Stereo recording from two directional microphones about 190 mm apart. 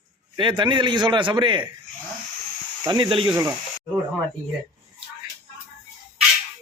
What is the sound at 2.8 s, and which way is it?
Speech, 25° right (ahead or behind).